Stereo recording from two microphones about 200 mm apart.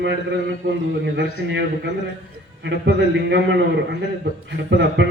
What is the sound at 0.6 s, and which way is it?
A man's voice, 55° right (ahead or behind).